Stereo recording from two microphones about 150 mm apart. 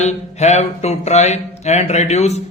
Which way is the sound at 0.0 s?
50° left (ahead or behind).